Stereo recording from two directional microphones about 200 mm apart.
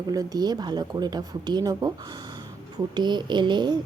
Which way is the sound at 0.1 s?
20° right (ahead or behind).